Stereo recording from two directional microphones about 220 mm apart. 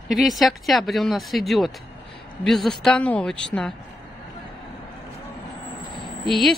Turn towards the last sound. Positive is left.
turn(degrees=0)  # may be behind; listen again after turning